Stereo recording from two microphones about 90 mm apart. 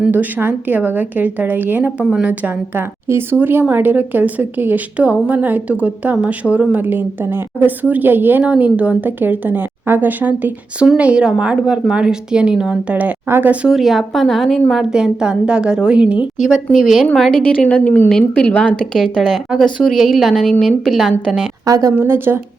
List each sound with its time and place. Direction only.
0.0 s a woman's voice: 20° right (ahead or behind)
13.7 s a woman's voice: centre (ahead or behind)
16.8 s a woman's voice: 5° left (ahead or behind)
17.4 s a woman's voice: 15° left (ahead or behind)
21.7 s a woman's voice: 40° right (ahead or behind)
21.9 s speech: 25° right (ahead or behind)